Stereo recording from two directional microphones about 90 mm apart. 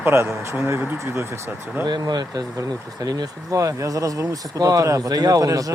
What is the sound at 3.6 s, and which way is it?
A man's voice, 35° right (ahead or behind).